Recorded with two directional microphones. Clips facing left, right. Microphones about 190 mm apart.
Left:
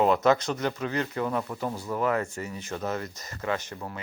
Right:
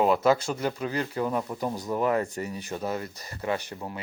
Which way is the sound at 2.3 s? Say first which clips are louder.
Right 3 dB; 35° right (ahead or behind).